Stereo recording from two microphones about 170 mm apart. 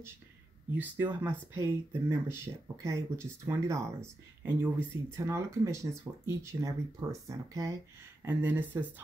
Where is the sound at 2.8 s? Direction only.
15° right (ahead or behind).